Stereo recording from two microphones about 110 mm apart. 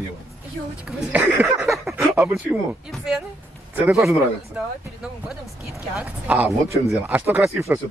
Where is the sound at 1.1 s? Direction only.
15° right (ahead or behind).